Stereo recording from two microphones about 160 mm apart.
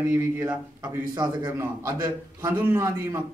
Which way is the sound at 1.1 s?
25° right (ahead or behind).